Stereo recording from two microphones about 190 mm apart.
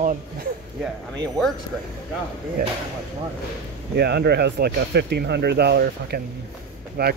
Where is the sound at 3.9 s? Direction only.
60° right (ahead or behind).